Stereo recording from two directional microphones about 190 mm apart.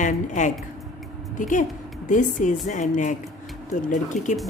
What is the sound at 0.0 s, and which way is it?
A woman's voice, 40° left (ahead or behind).